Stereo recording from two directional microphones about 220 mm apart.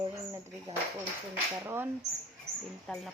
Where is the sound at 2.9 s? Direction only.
Centre (ahead or behind).